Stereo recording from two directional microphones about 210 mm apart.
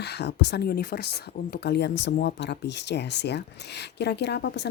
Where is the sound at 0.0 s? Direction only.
50° left (ahead or behind).